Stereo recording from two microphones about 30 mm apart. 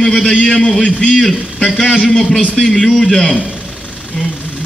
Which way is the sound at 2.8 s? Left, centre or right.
Centre.